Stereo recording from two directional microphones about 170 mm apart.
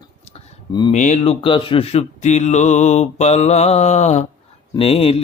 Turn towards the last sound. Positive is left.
turn(degrees=35)  # may be behind; listen again after turning